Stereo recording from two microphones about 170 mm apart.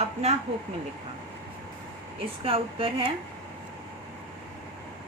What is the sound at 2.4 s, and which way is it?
Speech, 30° right (ahead or behind).